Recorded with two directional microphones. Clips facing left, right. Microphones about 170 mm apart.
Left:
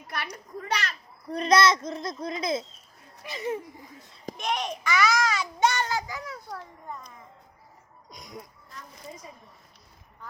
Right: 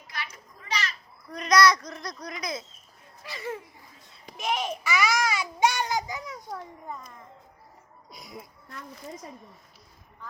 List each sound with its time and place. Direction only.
0.1 s children playing: 60° left (ahead or behind)
1.3 s speech: 30° left (ahead or behind)
4.4 s a child's voice: 5° right (ahead or behind)
6.9 s speech: centre (ahead or behind)